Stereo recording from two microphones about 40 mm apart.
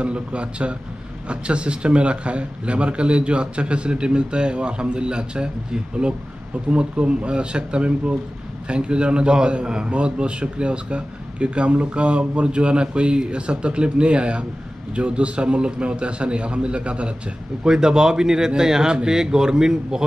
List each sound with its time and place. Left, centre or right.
0.0 s a man's voice: right
17.6 s a man's voice: centre